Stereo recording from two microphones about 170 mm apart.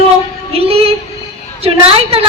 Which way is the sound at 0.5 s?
35° right (ahead or behind).